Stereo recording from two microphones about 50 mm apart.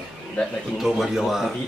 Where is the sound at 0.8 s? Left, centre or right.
Centre.